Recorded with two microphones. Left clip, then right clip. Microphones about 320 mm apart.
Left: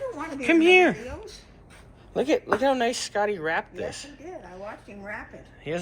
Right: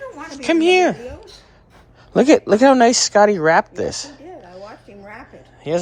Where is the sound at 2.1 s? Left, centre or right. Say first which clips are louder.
Right 11 dB; right.